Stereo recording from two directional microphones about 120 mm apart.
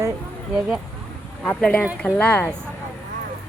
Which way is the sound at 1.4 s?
10° left (ahead or behind).